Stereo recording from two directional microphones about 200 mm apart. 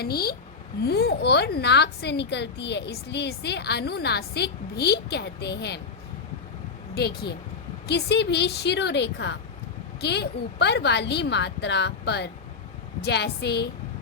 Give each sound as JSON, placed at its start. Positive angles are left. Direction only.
{"t": 0.0, "sound": "a woman's voice", "side_deg": 50}
{"t": 6.9, "sound": "a woman's voice", "side_deg": 55}